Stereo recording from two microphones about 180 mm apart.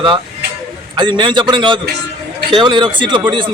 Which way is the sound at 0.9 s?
25° right (ahead or behind).